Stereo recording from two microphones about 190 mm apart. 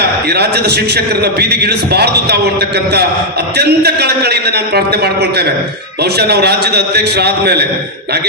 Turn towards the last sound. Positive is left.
turn(degrees=-60)  # may be behind; listen again after turning